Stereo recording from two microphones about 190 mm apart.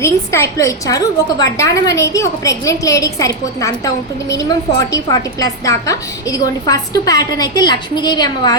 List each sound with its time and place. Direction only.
0.0 s a woman's voice: 15° left (ahead or behind)